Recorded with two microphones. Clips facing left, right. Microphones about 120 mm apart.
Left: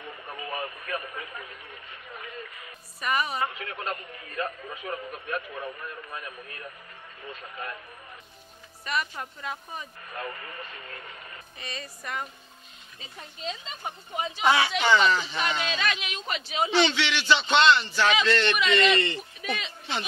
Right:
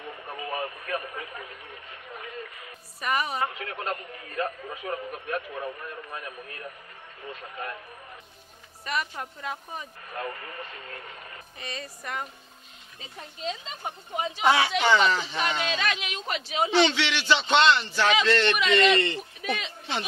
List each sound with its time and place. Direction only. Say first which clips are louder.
0.3 s radio: right 2 dB; 30° right (ahead or behind)
0.8 s a man's voice: right 2 dB; 30° right (ahead or behind)
3.0 s speech: even; 45° right (ahead or behind)
3.8 s a man's voice: right 2 dB; 25° right (ahead or behind)
8.8 s speech: even; 45° right (ahead or behind)
9.2 s speech: right 1 dB; 35° right (ahead or behind)
11.6 s speech: right 1 dB; 45° right (ahead or behind)
13.5 s speech: right 1 dB; 50° right (ahead or behind)